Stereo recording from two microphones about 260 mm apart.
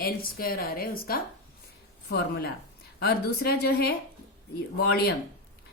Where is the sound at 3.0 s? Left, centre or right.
Left.